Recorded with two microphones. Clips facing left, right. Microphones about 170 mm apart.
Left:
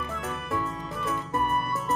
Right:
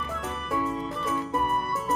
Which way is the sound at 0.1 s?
Centre (ahead or behind).